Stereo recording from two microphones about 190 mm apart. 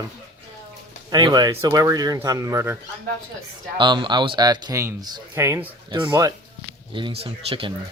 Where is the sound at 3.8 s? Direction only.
25° right (ahead or behind).